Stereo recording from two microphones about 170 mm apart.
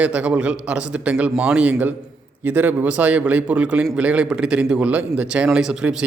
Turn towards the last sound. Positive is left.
turn(degrees=-5)  # may be behind; listen again after turning